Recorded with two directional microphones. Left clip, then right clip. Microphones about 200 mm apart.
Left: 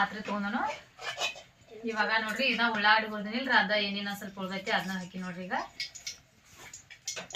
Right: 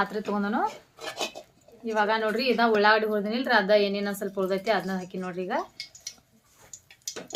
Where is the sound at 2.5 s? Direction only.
35° right (ahead or behind).